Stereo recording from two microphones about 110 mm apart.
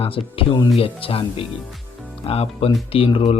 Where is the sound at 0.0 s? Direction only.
55° left (ahead or behind).